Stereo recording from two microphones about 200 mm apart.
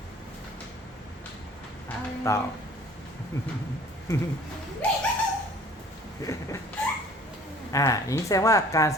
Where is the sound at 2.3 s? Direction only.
15° left (ahead or behind).